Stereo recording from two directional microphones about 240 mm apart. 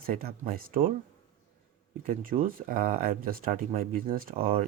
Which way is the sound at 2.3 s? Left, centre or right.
Right.